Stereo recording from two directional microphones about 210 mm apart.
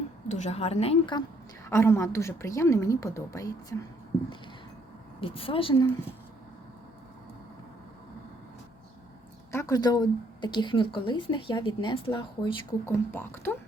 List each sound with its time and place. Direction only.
0.3 s speech: 35° left (ahead or behind)
1.7 s a woman's voice: 10° left (ahead or behind)
5.2 s speech: 25° left (ahead or behind)
9.5 s speech: 15° left (ahead or behind)
13.1 s a woman's voice: 10° left (ahead or behind)